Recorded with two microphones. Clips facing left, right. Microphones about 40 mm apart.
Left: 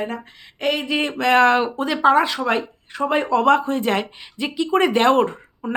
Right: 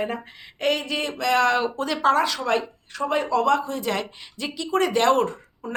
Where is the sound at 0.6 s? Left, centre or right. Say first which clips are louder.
Left 2 dB; centre.